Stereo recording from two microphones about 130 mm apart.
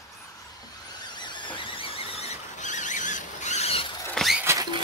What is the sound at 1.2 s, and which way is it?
Squeal, 35° left (ahead or behind).